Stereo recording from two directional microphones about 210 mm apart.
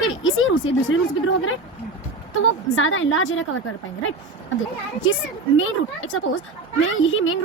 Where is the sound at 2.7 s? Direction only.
70° left (ahead or behind).